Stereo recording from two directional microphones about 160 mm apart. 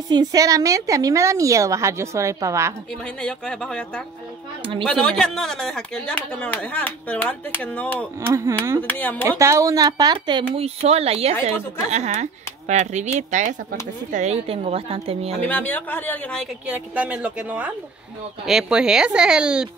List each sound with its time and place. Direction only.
0.1 s a woman's voice: 25° right (ahead or behind)
3.2 s speech: 5° left (ahead or behind)
8.3 s a woman's voice: 20° right (ahead or behind)
8.8 s speech: 10° left (ahead or behind)
9.4 s a woman's voice: 20° right (ahead or behind)
10.5 s speech: 40° right (ahead or behind)
15.4 s speech: 10° left (ahead or behind)
16.6 s a woman's voice: 10° right (ahead or behind)